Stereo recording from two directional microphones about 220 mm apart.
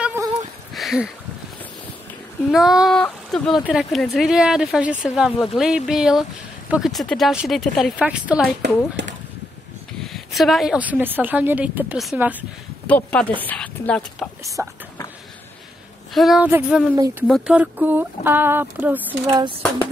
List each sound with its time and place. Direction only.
0.0 s a sound: 10° right (ahead or behind)
2.5 s speech: centre (ahead or behind)
10.0 s a woman's voice: centre (ahead or behind)
12.8 s speech: 5° left (ahead or behind)
14.4 s speech: 15° right (ahead or behind)
16.1 s speech: centre (ahead or behind)
16.9 s a woman's voice: 15° right (ahead or behind)